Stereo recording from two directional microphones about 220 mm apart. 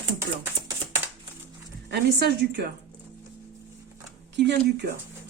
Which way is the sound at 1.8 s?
50° right (ahead or behind).